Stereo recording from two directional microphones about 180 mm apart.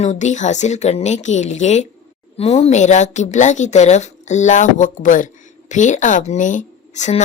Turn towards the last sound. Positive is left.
turn(degrees=40)  # may be behind; listen again after turning